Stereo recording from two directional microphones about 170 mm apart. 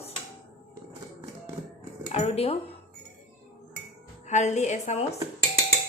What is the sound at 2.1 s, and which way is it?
Speech, 35° left (ahead or behind).